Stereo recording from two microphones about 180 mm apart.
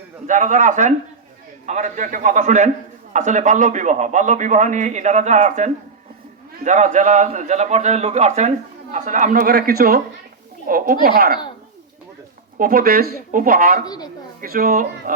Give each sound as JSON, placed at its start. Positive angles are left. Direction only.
{"t": 0.3, "sound": "a man's voice", "side_deg": -45}
{"t": 12.5, "sound": "a man's voice", "side_deg": -55}
{"t": 13.8, "sound": "a woman's voice", "side_deg": 20}
{"t": 14.4, "sound": "a man's voice", "side_deg": -55}